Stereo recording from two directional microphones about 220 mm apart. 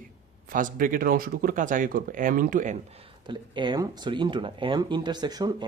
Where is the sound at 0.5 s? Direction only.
40° right (ahead or behind).